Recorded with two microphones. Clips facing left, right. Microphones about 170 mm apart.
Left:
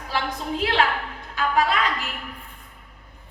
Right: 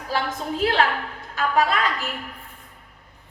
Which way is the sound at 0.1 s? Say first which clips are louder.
Right 1 dB; 40° right (ahead or behind).